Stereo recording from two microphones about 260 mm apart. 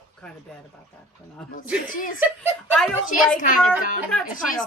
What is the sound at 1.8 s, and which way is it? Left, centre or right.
Speech, left.